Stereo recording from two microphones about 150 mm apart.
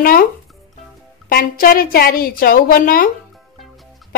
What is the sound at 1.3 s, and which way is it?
A woman's voice, 75° left (ahead or behind).